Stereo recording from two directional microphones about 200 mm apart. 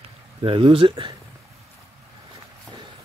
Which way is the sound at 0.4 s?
25° right (ahead or behind).